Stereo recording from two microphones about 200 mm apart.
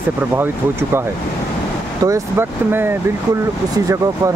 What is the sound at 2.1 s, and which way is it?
Speech, 10° right (ahead or behind).